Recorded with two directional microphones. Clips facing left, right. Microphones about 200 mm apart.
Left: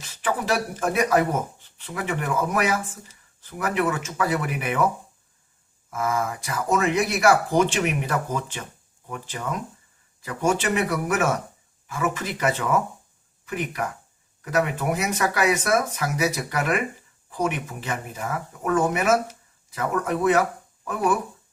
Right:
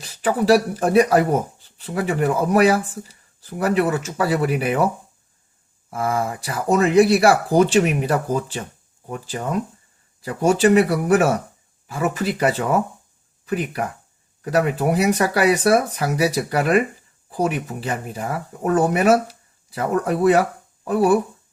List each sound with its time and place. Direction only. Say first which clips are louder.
0.0 s speech: right 7 dB; 35° right (ahead or behind)
5.9 s speech: right 3 dB; 35° right (ahead or behind)